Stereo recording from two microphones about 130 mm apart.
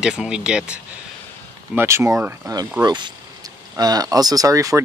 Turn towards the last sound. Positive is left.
turn(degrees=-25)  # may be behind; listen again after turning